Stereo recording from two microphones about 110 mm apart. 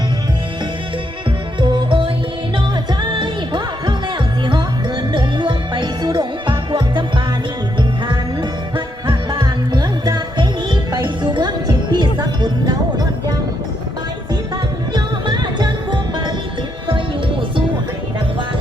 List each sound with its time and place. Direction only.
1.6 s music: 45° right (ahead or behind)
5.1 s music: 45° right (ahead or behind)
14.9 s music: 40° right (ahead or behind)